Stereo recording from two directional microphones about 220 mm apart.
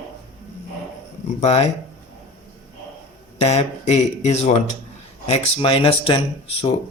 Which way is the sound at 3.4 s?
30° left (ahead or behind).